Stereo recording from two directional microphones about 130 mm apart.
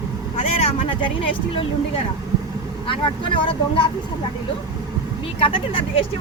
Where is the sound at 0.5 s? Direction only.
50° left (ahead or behind).